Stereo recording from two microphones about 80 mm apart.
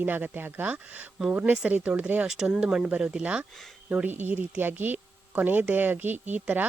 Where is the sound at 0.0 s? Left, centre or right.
Right.